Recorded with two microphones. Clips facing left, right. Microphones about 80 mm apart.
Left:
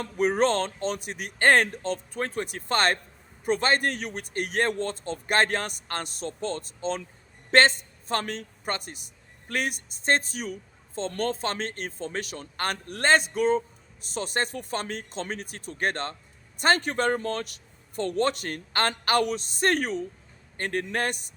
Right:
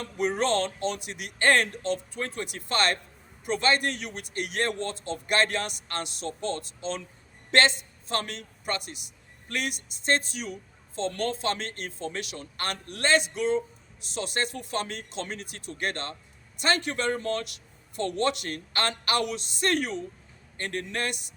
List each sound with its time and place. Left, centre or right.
0.0 s a man's voice: left
6.2 s speech: right
6.6 s a man's voice: left